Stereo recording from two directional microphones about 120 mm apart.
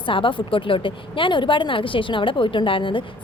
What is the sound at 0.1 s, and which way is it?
Speech, 45° left (ahead or behind).